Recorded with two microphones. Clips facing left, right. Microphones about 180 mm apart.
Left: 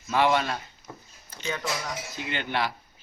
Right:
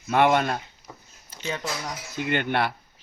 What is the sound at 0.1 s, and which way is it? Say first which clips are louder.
Speech: right 3 dB; 55° right (ahead or behind).